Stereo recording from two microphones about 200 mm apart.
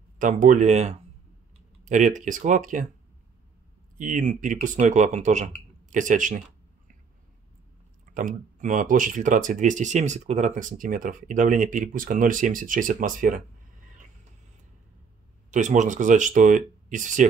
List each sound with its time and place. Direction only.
0.2 s speech: 40° right (ahead or behind)
4.0 s speech: 40° right (ahead or behind)
8.0 s speech: 40° right (ahead or behind)
15.5 s speech: 40° right (ahead or behind)